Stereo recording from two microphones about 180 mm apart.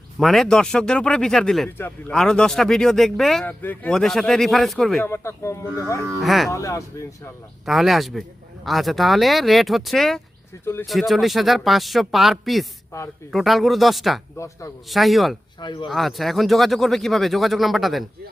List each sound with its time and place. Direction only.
0.2 s speech: centre (ahead or behind)
5.0 s speech: 15° left (ahead or behind)
6.1 s speech: centre (ahead or behind)
6.5 s speech: 15° left (ahead or behind)
7.6 s speech: centre (ahead or behind)
14.3 s speech: 15° left (ahead or behind)
14.8 s speech: centre (ahead or behind)
15.6 s speech: 25° left (ahead or behind)
15.9 s speech: centre (ahead or behind)